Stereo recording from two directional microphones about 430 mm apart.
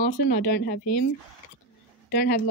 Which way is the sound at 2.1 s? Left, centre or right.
Left.